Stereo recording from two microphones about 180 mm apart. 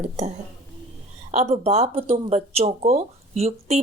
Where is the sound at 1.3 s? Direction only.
35° right (ahead or behind).